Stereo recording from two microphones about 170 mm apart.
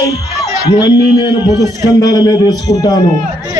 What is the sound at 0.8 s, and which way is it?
A man's voice, 25° left (ahead or behind).